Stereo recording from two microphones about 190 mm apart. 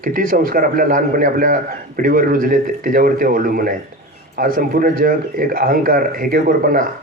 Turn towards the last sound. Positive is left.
turn(degrees=-45)  # may be behind; listen again after turning